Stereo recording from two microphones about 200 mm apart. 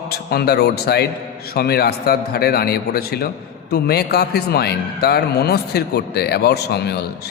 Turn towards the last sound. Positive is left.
turn(degrees=55)  # may be behind; listen again after turning